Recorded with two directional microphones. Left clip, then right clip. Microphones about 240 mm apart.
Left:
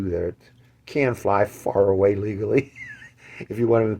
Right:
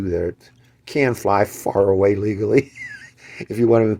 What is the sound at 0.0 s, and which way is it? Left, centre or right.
Speech, right.